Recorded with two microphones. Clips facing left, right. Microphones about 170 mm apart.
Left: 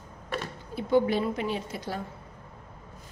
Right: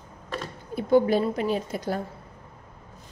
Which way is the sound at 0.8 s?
45° right (ahead or behind).